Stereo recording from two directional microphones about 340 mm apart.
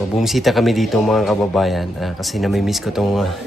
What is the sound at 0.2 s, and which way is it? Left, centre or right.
Speech, centre.